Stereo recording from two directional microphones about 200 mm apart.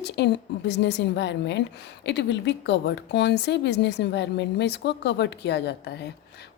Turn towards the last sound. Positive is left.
turn(degrees=55)  # may be behind; listen again after turning